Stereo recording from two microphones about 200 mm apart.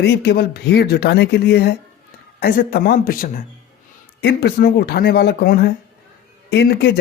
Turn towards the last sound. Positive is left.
turn(degrees=55)  # may be behind; listen again after turning